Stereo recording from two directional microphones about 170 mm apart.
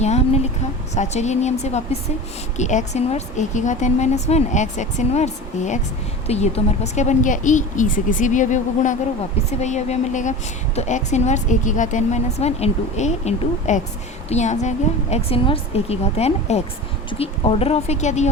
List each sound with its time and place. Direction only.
0.0 s a woman's voice: 40° left (ahead or behind)